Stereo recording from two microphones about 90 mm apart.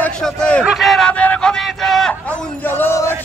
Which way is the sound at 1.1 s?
15° left (ahead or behind).